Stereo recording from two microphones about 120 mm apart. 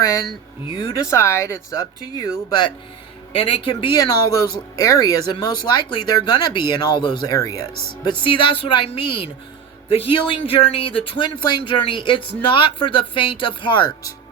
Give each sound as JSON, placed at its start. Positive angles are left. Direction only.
{"t": 0.0, "sound": "speech", "side_deg": 30}
{"t": 2.5, "sound": "speech", "side_deg": 40}
{"t": 3.9, "sound": "speech", "side_deg": 30}
{"t": 8.1, "sound": "speech", "side_deg": 45}